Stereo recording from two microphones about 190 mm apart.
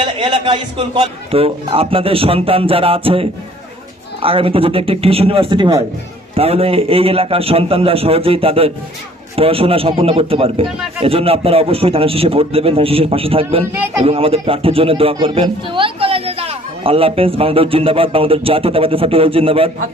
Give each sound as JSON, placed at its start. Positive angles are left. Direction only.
{"t": 0.0, "sound": "a man's voice", "side_deg": -25}
{"t": 13.7, "sound": "a man's voice", "side_deg": -10}
{"t": 14.0, "sound": "speech", "side_deg": -30}